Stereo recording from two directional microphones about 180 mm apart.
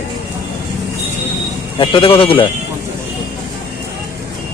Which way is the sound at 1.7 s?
30° left (ahead or behind).